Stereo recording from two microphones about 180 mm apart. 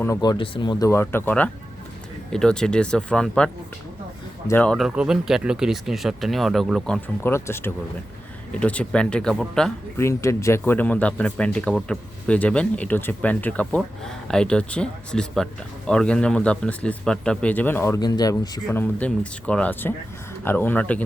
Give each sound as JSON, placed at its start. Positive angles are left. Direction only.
{"t": 0.0, "sound": "speech", "side_deg": 20}
{"t": 10.0, "sound": "speech", "side_deg": 15}